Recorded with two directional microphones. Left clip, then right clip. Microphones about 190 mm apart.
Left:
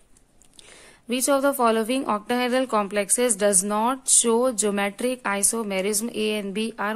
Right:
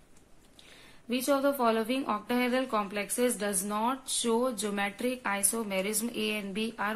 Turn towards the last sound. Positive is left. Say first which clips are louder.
# left 6 dB
turn(degrees=45)  # may be behind; listen again after turning